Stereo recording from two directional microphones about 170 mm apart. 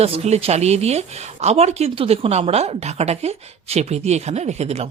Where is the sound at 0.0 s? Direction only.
35° right (ahead or behind).